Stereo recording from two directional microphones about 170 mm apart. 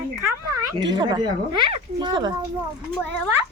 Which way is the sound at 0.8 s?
25° right (ahead or behind).